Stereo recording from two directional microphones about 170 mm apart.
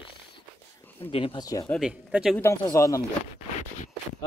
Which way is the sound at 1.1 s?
30° left (ahead or behind).